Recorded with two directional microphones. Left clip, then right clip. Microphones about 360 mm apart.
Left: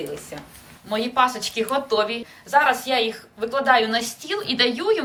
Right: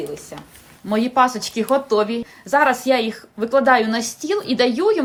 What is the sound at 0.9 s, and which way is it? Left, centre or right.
A woman's voice, centre.